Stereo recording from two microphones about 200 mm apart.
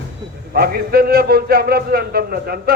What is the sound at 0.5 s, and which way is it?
A man's voice, 50° right (ahead or behind).